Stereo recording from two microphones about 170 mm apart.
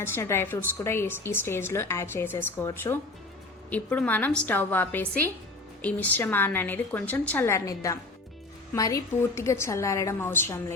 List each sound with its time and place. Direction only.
0.0 s speech: 15° left (ahead or behind)